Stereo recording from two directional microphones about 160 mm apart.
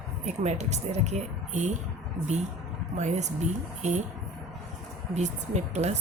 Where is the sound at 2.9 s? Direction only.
45° right (ahead or behind).